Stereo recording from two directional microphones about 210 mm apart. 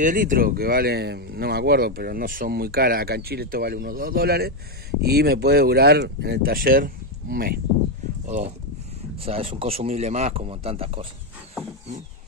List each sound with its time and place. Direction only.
0.0 s speech: 40° right (ahead or behind)
8.3 s speech: 30° right (ahead or behind)